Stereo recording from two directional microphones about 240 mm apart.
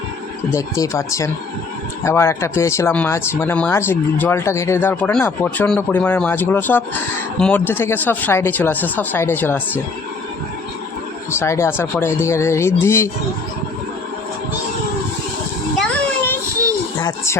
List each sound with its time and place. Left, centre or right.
0.5 s speech: centre
11.3 s speech: centre
17.0 s speech: centre